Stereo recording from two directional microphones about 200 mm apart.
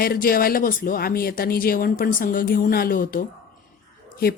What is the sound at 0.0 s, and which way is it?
Speech, 45° left (ahead or behind).